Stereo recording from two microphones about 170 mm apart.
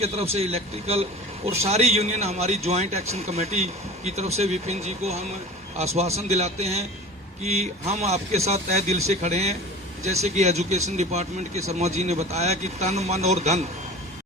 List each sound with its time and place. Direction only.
0.0 s a man's voice: 35° right (ahead or behind)